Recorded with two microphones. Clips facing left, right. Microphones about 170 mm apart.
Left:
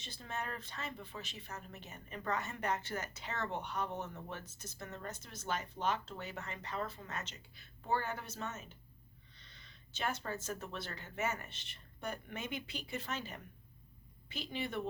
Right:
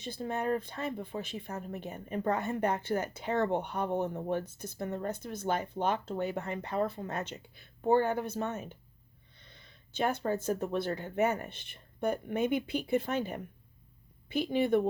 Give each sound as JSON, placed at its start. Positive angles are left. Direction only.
{"t": 0.0, "sound": "speech", "side_deg": -55}
{"t": 10.0, "sound": "speech", "side_deg": -55}